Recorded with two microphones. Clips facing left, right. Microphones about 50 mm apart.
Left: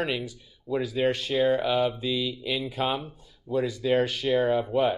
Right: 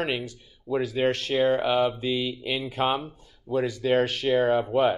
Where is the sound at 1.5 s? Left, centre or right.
Right.